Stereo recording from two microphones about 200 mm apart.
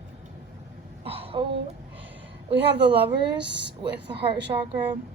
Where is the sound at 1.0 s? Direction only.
30° right (ahead or behind).